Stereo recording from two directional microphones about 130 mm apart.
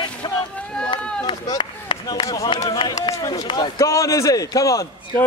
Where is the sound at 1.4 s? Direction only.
35° left (ahead or behind).